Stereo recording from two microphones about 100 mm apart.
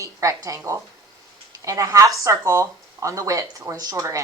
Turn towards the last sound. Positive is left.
turn(degrees=-30)  # may be behind; listen again after turning